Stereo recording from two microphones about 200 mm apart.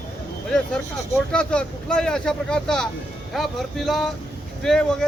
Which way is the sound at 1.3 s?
5° left (ahead or behind).